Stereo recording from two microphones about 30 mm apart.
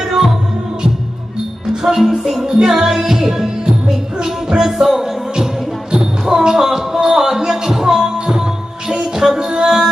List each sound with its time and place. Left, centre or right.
1.7 s music: centre
5.9 s a sound: right
6.9 s music: centre